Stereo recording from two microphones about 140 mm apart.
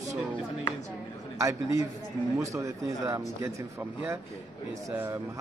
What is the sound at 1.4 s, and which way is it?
Speech, 20° right (ahead or behind).